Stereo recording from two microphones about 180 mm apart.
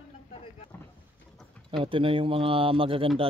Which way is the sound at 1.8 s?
30° right (ahead or behind).